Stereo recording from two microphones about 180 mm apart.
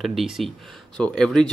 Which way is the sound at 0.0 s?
Centre (ahead or behind).